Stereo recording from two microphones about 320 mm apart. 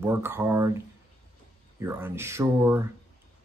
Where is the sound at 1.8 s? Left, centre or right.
Centre.